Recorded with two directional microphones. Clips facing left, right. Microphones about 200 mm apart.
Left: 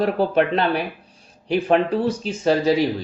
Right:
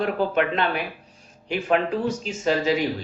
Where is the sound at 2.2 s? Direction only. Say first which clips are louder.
Left 4 dB; 35° left (ahead or behind).